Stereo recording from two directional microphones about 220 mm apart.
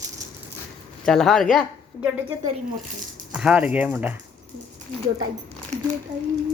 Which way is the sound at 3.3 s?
5° right (ahead or behind).